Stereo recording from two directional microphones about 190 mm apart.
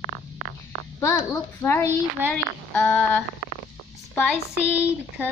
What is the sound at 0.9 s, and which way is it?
A woman's voice, 15° left (ahead or behind).